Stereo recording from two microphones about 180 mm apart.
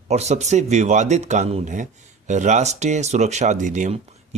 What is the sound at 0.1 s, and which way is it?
Speech, 40° right (ahead or behind).